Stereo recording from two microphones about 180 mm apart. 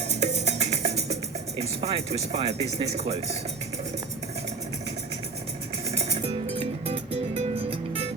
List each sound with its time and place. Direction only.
0.1 s music: 40° right (ahead or behind)
1.5 s speech: 35° right (ahead or behind)
6.0 s music: 35° right (ahead or behind)